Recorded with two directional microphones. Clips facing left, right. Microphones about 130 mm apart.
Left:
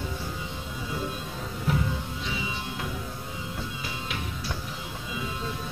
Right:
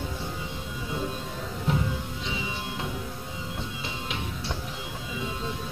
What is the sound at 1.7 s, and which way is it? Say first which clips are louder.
Music: even; 25° right (ahead or behind).